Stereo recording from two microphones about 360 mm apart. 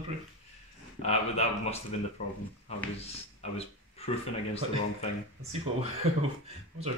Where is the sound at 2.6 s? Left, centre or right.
Centre.